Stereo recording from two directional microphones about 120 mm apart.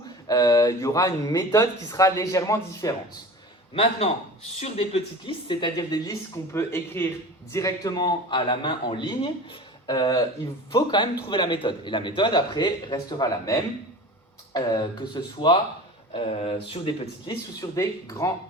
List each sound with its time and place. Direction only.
0.3 s speech: 30° left (ahead or behind)
4.6 s a man's voice: 55° left (ahead or behind); by 6.4 s 35° left (ahead or behind)
6.5 s a man's voice: 20° left (ahead or behind); by 15.5 s 40° left (ahead or behind)
16.1 s speech: 55° left (ahead or behind)
17.6 s speech: 25° left (ahead or behind)